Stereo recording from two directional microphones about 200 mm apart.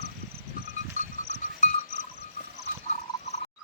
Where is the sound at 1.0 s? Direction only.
40° left (ahead or behind).